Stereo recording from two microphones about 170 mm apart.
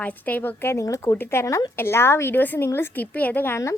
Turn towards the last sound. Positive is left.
turn(degrees=15)  # may be behind; listen again after turning